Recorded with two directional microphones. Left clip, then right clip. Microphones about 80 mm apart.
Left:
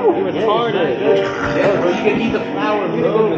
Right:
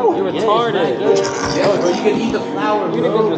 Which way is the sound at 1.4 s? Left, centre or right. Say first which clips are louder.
Even; right.